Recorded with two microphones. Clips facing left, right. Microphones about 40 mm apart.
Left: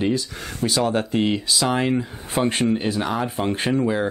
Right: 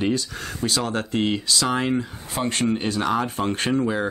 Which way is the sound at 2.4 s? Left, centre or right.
Centre.